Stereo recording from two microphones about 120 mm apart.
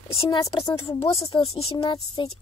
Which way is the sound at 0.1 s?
55° left (ahead or behind).